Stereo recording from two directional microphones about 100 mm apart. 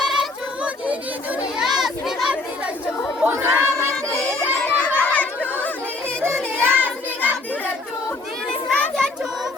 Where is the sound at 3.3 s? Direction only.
25° right (ahead or behind).